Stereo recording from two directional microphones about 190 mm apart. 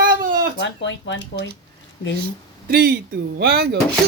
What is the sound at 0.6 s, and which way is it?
Speech, 70° left (ahead or behind).